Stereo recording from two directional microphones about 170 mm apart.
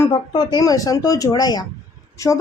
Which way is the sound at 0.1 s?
25° left (ahead or behind).